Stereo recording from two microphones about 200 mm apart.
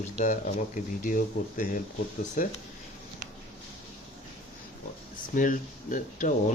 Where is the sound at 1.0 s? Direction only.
40° left (ahead or behind).